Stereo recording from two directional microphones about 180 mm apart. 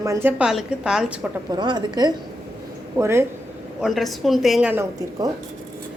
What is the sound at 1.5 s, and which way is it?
A woman's voice, 25° right (ahead or behind).